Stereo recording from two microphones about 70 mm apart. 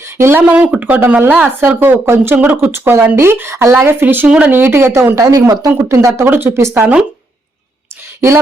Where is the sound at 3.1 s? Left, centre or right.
Right.